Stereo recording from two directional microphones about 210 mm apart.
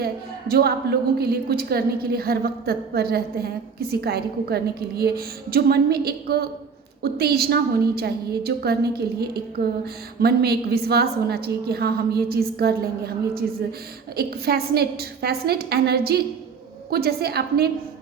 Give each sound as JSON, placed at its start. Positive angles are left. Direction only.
{"t": 0.0, "sound": "a woman's voice", "side_deg": -45}
{"t": 14.2, "sound": "a woman's voice", "side_deg": -50}